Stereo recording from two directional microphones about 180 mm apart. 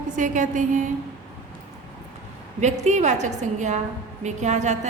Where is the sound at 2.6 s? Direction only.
40° right (ahead or behind).